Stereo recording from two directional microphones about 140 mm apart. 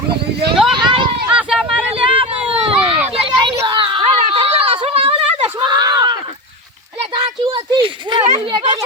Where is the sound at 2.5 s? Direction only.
45° right (ahead or behind).